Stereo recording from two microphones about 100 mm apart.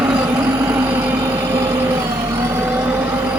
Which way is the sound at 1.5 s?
40° right (ahead or behind).